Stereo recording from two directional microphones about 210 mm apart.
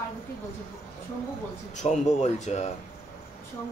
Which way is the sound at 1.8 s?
35° left (ahead or behind).